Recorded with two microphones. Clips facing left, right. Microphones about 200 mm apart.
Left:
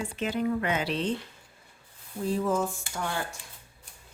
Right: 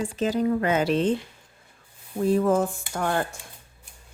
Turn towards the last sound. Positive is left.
turn(degrees=-55)  # may be behind; listen again after turning